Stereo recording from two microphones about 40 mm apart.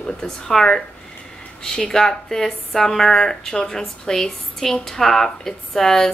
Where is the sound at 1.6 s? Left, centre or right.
Centre.